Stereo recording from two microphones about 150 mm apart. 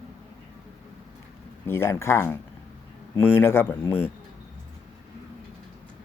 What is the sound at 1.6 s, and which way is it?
Speech, 15° left (ahead or behind).